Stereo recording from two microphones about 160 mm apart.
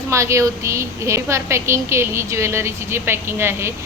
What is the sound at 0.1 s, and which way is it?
A woman's voice, 20° right (ahead or behind).